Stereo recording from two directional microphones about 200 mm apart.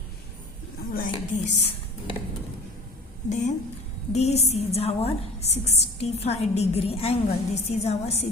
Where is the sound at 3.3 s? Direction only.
40° left (ahead or behind).